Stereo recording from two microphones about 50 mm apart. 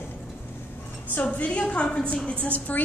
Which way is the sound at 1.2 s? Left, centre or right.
Left.